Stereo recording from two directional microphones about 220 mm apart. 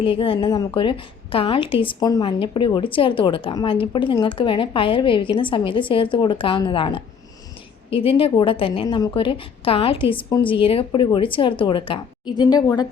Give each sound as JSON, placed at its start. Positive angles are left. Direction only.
{"t": 0.0, "sound": "a woman's voice", "side_deg": 25}